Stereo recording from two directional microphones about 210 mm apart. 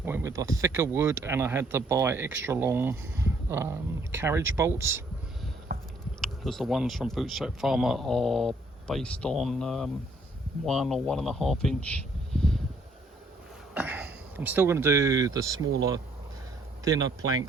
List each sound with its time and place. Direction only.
0.0 s speech: 10° right (ahead or behind)
5.7 s a sound: 45° right (ahead or behind)
6.2 s speech: centre (ahead or behind)
13.7 s speech: 5° right (ahead or behind)
16.8 s speech: 15° right (ahead or behind)